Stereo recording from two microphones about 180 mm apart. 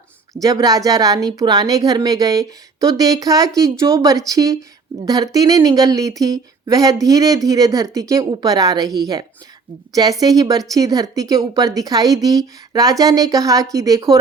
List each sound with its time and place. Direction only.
0.4 s speech: 20° right (ahead or behind)